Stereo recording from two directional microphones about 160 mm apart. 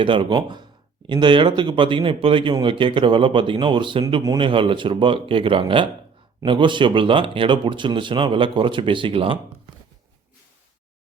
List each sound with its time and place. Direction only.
0.0 s speech: 30° right (ahead or behind)